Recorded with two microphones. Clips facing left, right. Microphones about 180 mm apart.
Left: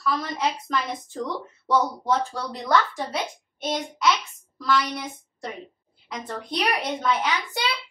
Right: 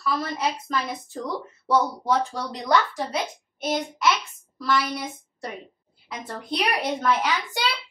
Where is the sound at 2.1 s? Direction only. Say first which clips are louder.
Right 1 dB; 15° right (ahead or behind).